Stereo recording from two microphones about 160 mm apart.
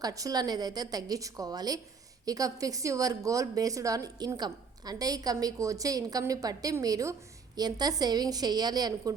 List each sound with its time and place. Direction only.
0.0 s a woman's voice: 20° right (ahead or behind)